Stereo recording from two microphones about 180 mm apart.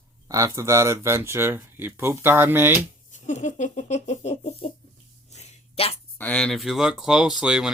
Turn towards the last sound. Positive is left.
turn(degrees=-5)  # may be behind; listen again after turning